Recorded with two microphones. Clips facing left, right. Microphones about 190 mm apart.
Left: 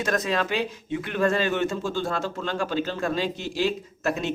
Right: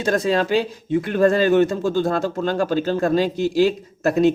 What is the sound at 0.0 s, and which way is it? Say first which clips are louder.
Speech: right 6 dB; 30° right (ahead or behind).